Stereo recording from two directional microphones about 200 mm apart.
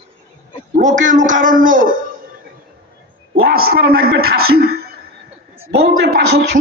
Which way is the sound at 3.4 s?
50° right (ahead or behind).